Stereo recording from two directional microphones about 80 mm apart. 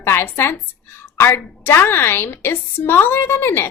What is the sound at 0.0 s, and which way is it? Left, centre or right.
A woman's voice, left.